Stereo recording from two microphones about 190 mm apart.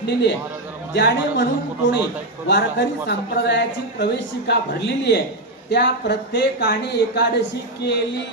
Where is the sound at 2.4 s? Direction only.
65° left (ahead or behind).